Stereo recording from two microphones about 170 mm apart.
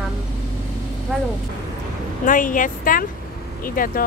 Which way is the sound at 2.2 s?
50° left (ahead or behind).